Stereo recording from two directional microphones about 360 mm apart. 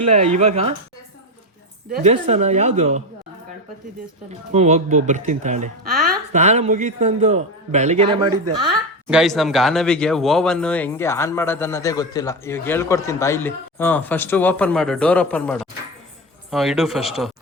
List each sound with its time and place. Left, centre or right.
0.1 s speech: centre
1.9 s a man's voice: centre
4.3 s a man's voice: centre
9.0 s speech: centre